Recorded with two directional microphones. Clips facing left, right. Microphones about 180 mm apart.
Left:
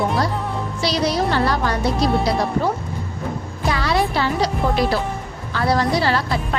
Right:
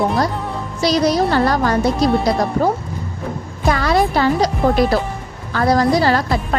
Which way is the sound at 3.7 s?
45° right (ahead or behind).